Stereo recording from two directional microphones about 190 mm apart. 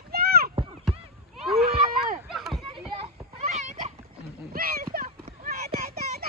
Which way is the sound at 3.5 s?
35° right (ahead or behind).